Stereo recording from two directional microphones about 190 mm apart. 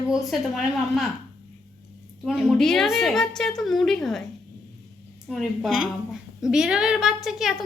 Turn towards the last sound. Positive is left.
turn(degrees=0)  # may be behind; listen again after turning